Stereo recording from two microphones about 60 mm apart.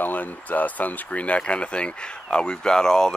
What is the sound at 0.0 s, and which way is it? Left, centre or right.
Speech, left.